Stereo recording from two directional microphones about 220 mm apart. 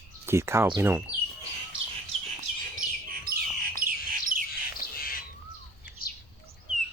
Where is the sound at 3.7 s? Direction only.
40° right (ahead or behind).